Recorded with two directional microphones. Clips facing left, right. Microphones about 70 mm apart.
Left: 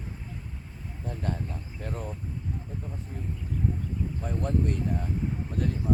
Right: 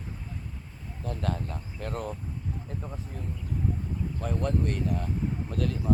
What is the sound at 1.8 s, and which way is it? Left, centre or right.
Speech, right.